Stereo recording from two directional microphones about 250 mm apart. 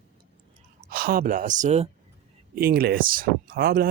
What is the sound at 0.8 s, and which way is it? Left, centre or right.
Speech, right.